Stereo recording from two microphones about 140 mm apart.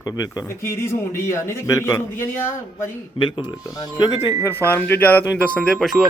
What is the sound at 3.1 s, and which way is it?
Speech, 35° left (ahead or behind).